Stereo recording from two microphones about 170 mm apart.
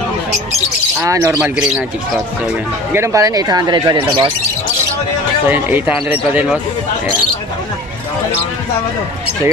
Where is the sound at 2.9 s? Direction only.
15° right (ahead or behind).